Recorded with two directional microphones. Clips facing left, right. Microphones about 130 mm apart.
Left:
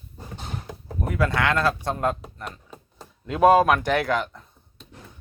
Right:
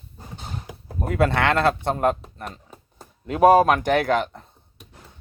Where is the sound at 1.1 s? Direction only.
25° right (ahead or behind).